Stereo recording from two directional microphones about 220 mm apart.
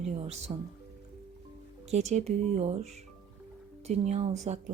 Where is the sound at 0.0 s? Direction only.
30° right (ahead or behind).